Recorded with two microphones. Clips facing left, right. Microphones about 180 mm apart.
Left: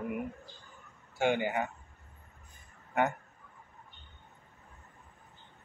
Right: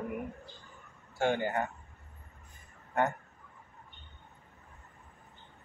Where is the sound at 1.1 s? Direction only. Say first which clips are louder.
Left 1 dB; 15° left (ahead or behind).